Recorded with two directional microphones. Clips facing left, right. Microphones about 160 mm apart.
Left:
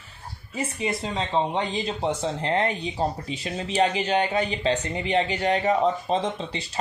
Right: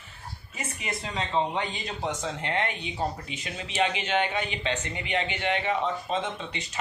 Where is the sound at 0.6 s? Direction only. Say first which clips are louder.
Left 8 dB; 30° left (ahead or behind).